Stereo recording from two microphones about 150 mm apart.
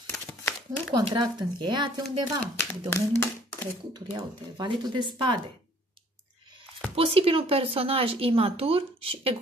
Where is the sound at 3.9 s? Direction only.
25° right (ahead or behind).